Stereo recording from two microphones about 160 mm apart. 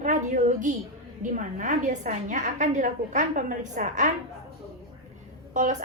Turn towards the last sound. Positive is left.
turn(degrees=-50)  # may be behind; listen again after turning